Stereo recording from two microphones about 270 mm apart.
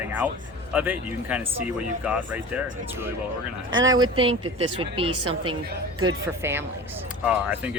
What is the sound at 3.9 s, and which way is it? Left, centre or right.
Speech, centre.